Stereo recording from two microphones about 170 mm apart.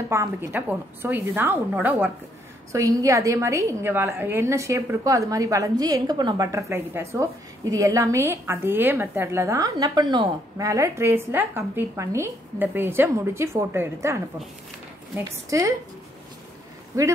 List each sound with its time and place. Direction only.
0.1 s a woman's voice: 15° right (ahead or behind)
16.9 s speech: 20° right (ahead or behind)